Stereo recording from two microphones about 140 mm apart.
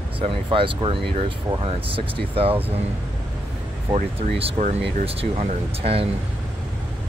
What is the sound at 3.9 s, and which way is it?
Speech, 45° right (ahead or behind).